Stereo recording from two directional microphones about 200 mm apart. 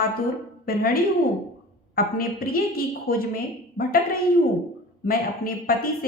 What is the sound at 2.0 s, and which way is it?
A woman's voice, 45° left (ahead or behind).